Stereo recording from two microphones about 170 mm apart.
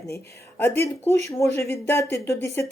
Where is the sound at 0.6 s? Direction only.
15° left (ahead or behind).